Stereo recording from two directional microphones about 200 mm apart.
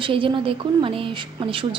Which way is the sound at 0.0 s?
25° right (ahead or behind).